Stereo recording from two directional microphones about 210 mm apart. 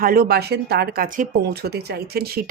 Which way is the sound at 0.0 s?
45° right (ahead or behind).